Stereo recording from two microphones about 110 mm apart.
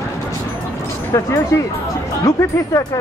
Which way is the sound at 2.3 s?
30° left (ahead or behind).